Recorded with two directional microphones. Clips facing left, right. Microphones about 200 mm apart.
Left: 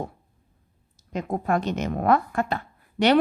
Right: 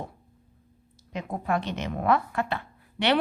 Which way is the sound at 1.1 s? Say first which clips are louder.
Left 4 dB; 45° left (ahead or behind).